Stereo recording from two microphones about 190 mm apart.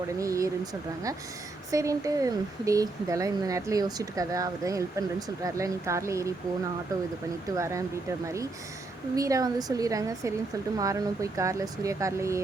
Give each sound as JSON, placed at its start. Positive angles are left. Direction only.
{"t": 0.2, "sound": "speech", "side_deg": -15}
{"t": 7.5, "sound": "speech", "side_deg": -15}
{"t": 9.1, "sound": "speech", "side_deg": -15}